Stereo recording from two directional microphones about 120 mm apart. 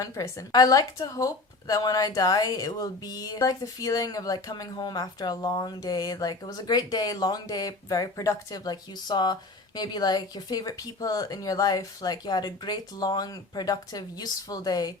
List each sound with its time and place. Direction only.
0.0 s speech: 30° left (ahead or behind)